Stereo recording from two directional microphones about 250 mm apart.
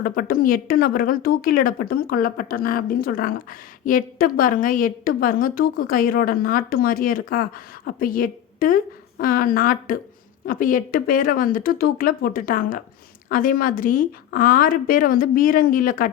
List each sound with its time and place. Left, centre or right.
0.0 s a woman's voice: left